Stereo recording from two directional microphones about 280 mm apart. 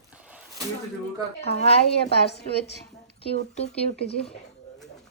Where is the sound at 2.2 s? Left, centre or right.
Left.